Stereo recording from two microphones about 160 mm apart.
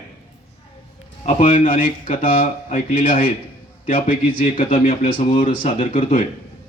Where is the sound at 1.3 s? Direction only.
50° left (ahead or behind).